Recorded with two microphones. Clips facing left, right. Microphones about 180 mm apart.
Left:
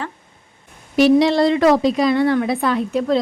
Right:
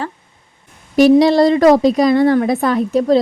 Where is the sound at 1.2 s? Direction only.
40° right (ahead or behind).